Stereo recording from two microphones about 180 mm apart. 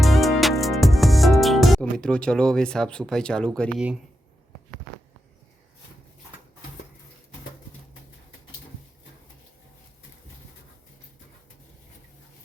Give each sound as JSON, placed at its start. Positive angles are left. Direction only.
{"t": 0.0, "sound": "music", "side_deg": 0}